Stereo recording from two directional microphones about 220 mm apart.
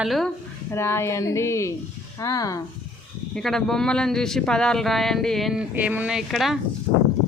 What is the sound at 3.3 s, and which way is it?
Speech, centre (ahead or behind).